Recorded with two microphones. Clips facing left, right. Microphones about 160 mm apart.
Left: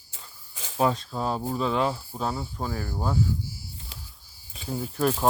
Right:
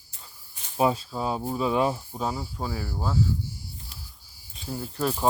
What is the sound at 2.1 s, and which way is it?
Speech, 5° right (ahead or behind).